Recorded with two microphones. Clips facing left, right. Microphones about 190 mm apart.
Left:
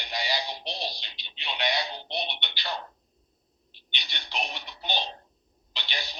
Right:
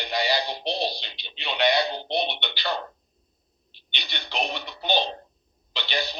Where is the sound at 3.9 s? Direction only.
65° right (ahead or behind).